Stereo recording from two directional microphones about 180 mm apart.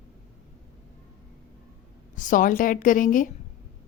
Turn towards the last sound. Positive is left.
turn(degrees=50)  # may be behind; listen again after turning